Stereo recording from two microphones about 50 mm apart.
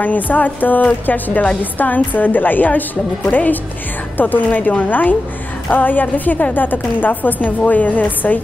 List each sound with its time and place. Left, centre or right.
0.0 s a woman's voice: left